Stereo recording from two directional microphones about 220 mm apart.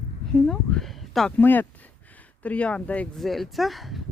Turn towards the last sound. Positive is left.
turn(degrees=0)  # may be behind; listen again after turning